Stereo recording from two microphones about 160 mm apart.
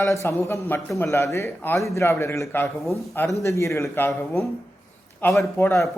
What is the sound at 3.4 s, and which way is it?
Speech, 20° left (ahead or behind).